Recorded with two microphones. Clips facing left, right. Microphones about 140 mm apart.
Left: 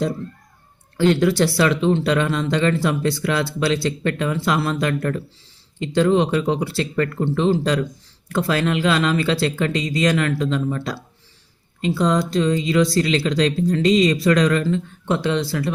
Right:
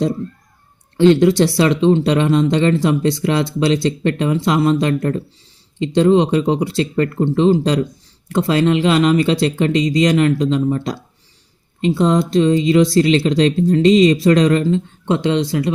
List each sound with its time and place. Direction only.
0.9 s speech: 25° right (ahead or behind)